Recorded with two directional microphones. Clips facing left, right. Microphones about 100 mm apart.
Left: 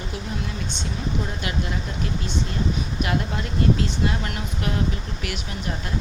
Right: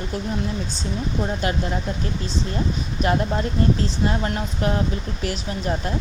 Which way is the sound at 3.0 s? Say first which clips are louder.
Right 7 dB; 35° right (ahead or behind).